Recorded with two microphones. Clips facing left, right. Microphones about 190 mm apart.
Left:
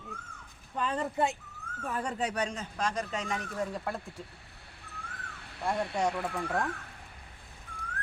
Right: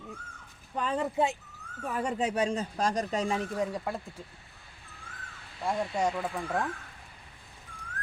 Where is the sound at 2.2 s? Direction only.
30° right (ahead or behind).